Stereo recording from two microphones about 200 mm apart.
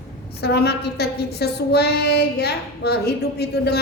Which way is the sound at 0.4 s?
55° left (ahead or behind).